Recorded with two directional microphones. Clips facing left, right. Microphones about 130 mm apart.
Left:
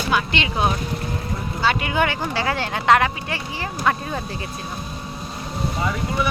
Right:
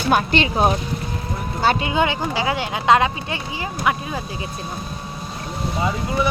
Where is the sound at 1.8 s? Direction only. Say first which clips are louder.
Right 2 dB; 20° right (ahead or behind).